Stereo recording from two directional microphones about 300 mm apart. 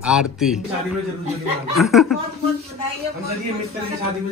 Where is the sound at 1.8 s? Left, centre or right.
Centre.